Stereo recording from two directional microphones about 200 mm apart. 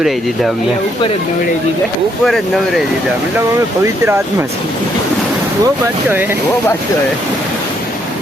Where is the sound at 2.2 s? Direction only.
Centre (ahead or behind).